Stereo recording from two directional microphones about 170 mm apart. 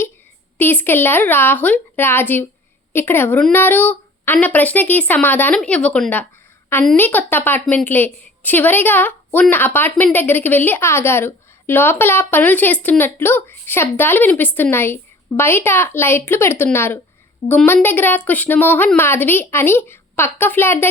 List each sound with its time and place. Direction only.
0.6 s a woman's voice: 10° left (ahead or behind)